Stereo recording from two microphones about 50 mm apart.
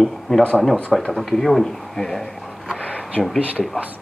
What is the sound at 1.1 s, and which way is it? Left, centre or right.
Speech, centre.